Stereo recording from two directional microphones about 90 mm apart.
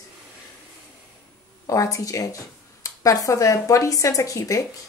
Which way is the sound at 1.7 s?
40° left (ahead or behind).